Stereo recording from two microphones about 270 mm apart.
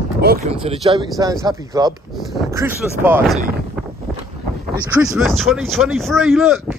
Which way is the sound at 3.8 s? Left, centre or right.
Centre.